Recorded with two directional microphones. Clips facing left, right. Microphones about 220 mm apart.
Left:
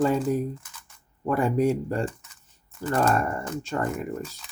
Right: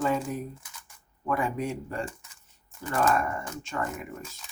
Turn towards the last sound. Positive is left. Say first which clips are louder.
# left 5 dB
turn(degrees=35)  # may be behind; listen again after turning